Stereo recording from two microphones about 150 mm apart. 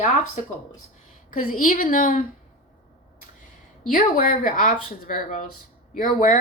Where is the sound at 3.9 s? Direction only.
65° left (ahead or behind).